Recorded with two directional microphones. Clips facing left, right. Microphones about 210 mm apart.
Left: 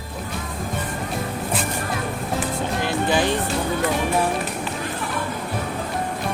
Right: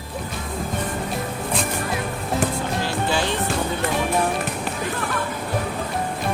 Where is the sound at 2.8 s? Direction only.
15° left (ahead or behind).